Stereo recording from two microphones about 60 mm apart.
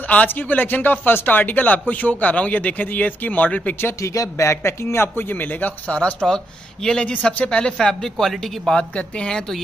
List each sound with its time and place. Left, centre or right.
0.0 s a man's voice: left
4.0 s speech: left; by 7.7 s centre
7.7 s speech: centre